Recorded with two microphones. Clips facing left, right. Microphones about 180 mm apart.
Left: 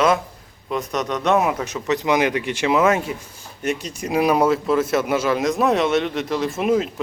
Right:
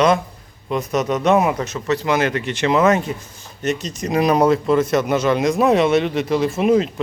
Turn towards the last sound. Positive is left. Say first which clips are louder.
# right 3 dB
turn(degrees=0)  # may be behind; listen again after turning